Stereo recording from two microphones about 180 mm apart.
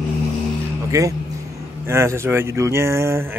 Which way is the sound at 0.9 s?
20° right (ahead or behind).